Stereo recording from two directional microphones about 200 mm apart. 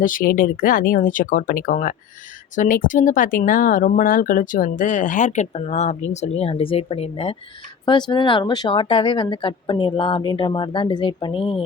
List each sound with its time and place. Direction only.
0.0 s speech: 45° left (ahead or behind); by 11.6 s 25° left (ahead or behind)